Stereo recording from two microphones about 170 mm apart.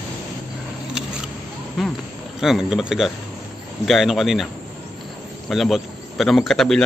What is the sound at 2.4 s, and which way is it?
Speech, centre (ahead or behind).